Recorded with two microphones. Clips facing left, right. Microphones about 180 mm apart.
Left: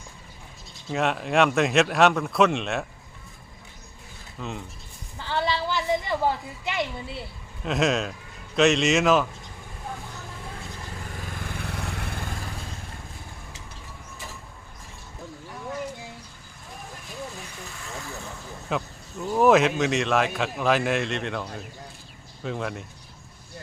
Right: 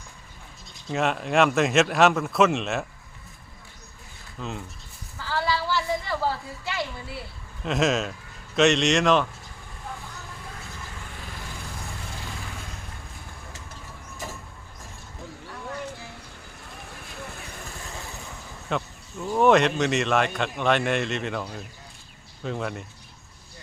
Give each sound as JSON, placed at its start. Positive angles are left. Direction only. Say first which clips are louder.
{"t": 0.9, "sound": "speech", "louder": "even", "side_deg": 0}
{"t": 4.4, "sound": "speech", "louder": "even", "side_deg": 0}
{"t": 5.1, "sound": "a sound", "louder": "even", "side_deg": 25}
{"t": 7.6, "sound": "speech", "louder": "even", "side_deg": 0}
{"t": 11.5, "sound": "vehicle", "louder": "left 5 dB", "side_deg": 65}
{"t": 18.7, "sound": "speech", "louder": "even", "side_deg": 5}